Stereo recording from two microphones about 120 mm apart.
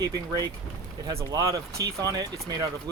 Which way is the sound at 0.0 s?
30° right (ahead or behind).